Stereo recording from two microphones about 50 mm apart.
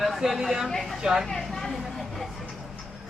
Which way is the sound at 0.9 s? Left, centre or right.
Centre.